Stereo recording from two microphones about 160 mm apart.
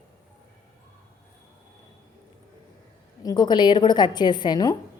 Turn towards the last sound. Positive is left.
turn(degrees=25)  # may be behind; listen again after turning